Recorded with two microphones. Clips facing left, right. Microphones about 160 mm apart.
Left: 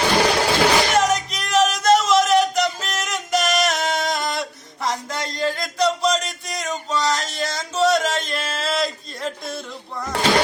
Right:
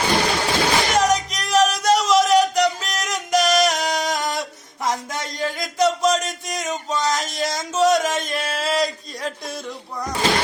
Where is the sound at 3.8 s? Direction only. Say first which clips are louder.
Even; 15° right (ahead or behind).